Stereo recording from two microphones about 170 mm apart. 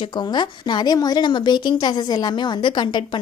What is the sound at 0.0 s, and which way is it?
A woman's voice, 25° left (ahead or behind).